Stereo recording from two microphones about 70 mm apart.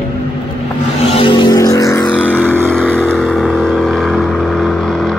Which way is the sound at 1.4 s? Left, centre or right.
Left.